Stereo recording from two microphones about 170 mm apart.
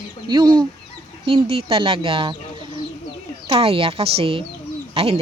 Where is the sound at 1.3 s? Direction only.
35° right (ahead or behind).